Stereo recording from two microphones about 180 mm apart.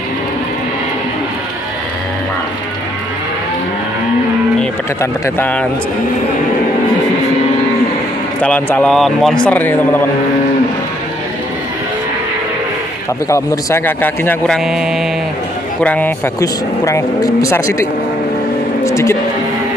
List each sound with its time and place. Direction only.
5.2 s speech: 10° left (ahead or behind)
8.4 s speech: 5° left (ahead or behind)
13.3 s speech: 15° left (ahead or behind)
14.6 s speech: centre (ahead or behind)
15.8 s speech: 10° left (ahead or behind)
18.9 s speech: 15° left (ahead or behind)